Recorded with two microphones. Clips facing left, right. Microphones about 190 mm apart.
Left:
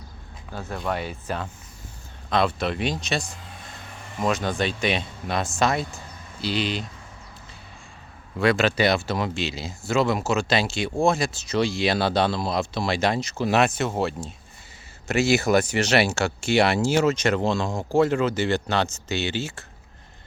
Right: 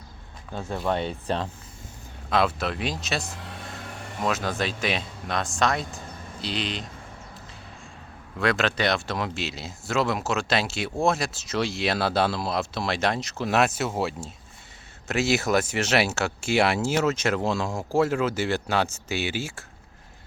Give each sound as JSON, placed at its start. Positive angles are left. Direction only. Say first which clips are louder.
{"t": 0.5, "sound": "speech", "louder": "right 2 dB", "side_deg": -20}
{"t": 2.3, "sound": "speech", "louder": "left 1 dB", "side_deg": 0}
{"t": 3.3, "sound": "vehicle", "louder": "right 4 dB", "side_deg": -70}
{"t": 4.2, "sound": "speech", "louder": "left 3 dB", "side_deg": 0}
{"t": 8.4, "sound": "speech", "louder": "left 4 dB", "side_deg": 0}